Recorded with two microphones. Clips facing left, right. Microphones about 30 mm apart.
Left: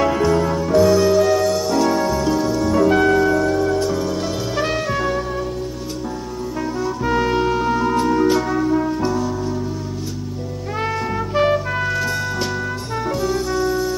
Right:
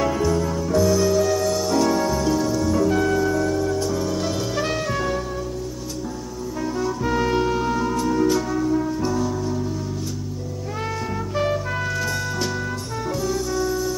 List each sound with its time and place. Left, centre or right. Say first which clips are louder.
0.0 s music: left 4 dB; left
4.0 s music: left 2 dB; centre
6.8 s brass instrument: left 3 dB; centre
7.9 s music: left 4 dB; left
11.3 s music: left 6 dB; left